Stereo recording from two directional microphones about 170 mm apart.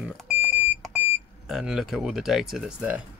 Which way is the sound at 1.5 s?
Centre (ahead or behind).